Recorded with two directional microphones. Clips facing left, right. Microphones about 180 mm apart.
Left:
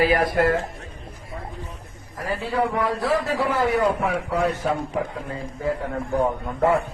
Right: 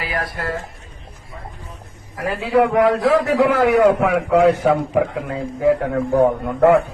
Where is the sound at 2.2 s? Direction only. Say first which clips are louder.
Right 7 dB; 75° right (ahead or behind).